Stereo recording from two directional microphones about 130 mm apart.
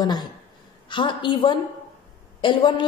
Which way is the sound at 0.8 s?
40° left (ahead or behind).